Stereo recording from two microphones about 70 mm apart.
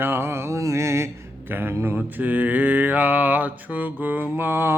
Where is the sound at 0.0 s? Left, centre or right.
Right.